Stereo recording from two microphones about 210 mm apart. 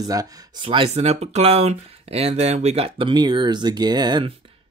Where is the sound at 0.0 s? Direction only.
15° right (ahead or behind).